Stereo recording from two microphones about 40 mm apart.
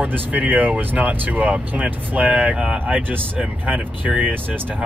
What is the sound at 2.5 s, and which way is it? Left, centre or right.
Speech, right.